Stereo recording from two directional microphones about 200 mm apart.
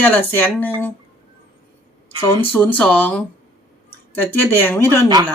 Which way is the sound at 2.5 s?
5° left (ahead or behind).